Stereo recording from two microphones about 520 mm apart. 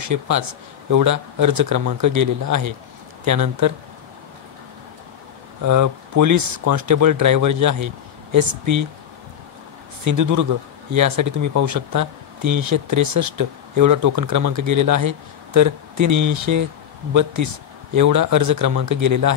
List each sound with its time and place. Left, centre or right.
0.0 s speech: right
5.7 s speech: right
10.0 s speech: right